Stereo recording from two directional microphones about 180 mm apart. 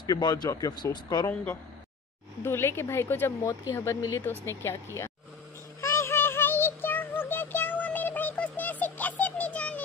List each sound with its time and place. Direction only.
0.0 s speech: 20° left (ahead or behind)
2.4 s speech: 15° left (ahead or behind)
5.8 s synthetic singing: 15° left (ahead or behind)